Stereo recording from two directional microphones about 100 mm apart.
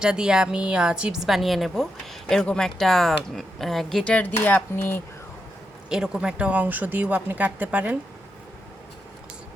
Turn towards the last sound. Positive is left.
turn(degrees=-15)  # may be behind; listen again after turning